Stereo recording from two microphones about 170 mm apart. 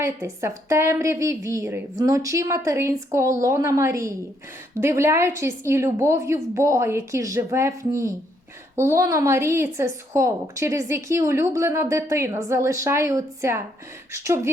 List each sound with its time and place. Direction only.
0.0 s a woman's voice: 15° right (ahead or behind)